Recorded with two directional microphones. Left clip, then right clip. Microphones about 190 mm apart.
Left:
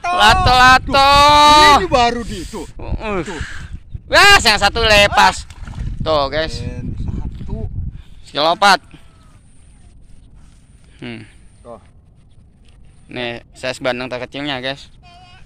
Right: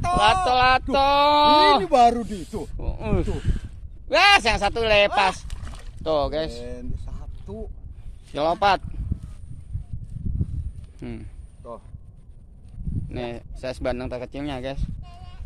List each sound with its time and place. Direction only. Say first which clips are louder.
0.2 s speech: left 9 dB; centre (ahead or behind)
1.9 s speech: left 2 dB; 65° right (ahead or behind)
2.8 s speech: left 6 dB; centre (ahead or behind)
6.6 s a sound: left 5 dB; 55° right (ahead or behind)
8.3 s speech: left 8 dB; 5° right (ahead or behind)
11.0 s speech: left 7 dB; centre (ahead or behind)
13.1 s speech: left 9 dB; centre (ahead or behind)